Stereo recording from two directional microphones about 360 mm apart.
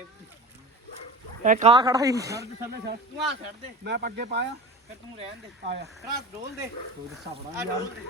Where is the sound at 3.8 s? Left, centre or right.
Right.